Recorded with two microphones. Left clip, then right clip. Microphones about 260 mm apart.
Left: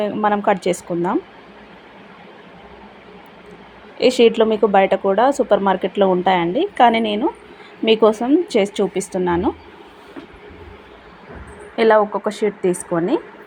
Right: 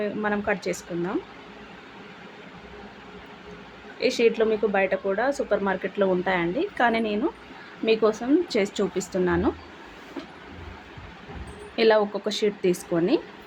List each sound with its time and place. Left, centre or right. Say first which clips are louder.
0.0 s speech: left 9 dB; centre
3.9 s speech: left 8 dB; left
11.8 s speech: left 6 dB; centre